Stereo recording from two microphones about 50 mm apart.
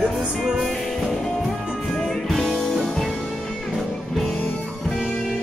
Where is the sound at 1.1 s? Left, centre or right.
Centre.